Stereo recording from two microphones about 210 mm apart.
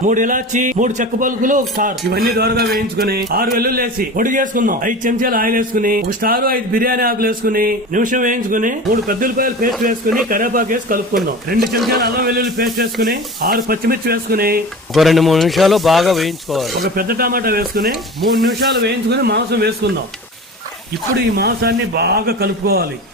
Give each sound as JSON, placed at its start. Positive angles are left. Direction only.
{"t": 0.0, "sound": "a man's voice", "side_deg": -40}
{"t": 14.9, "sound": "speech", "side_deg": 0}
{"t": 16.8, "sound": "a man's voice", "side_deg": -45}
{"t": 21.3, "sound": "a man's voice", "side_deg": -50}